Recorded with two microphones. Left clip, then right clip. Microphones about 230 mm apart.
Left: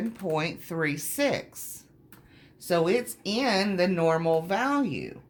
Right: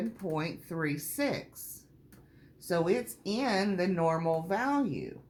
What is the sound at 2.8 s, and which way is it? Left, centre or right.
Speech, left.